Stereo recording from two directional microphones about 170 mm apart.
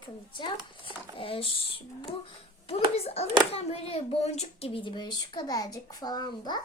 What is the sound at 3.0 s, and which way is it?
A child's voice, 35° left (ahead or behind).